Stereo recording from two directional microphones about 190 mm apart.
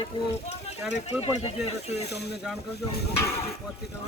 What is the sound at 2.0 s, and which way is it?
Speech, 60° left (ahead or behind).